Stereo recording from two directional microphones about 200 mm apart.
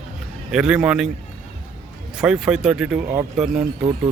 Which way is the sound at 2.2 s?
5° right (ahead or behind).